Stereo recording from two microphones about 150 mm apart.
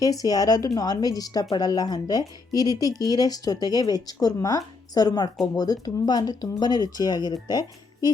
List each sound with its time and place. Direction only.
0.0 s speech: 25° left (ahead or behind)